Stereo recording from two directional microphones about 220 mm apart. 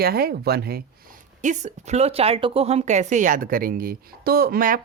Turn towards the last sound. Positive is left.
turn(degrees=-40)  # may be behind; listen again after turning